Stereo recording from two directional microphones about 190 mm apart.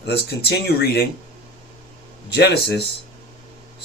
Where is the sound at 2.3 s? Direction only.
60° left (ahead or behind).